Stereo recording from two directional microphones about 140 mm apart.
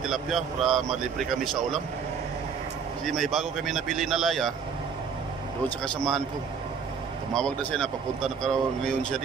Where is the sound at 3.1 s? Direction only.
Centre (ahead or behind).